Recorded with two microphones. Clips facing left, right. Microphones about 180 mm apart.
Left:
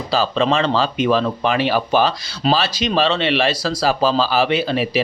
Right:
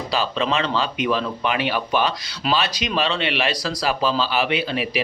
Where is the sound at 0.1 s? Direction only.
40° left (ahead or behind).